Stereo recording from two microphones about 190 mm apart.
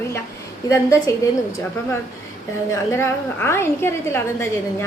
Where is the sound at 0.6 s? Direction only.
15° left (ahead or behind).